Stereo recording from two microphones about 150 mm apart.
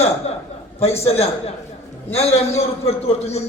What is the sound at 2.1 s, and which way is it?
A man's voice, 45° left (ahead or behind).